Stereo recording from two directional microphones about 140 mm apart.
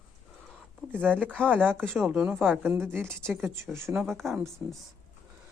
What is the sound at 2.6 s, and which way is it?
A woman's voice, 15° right (ahead or behind).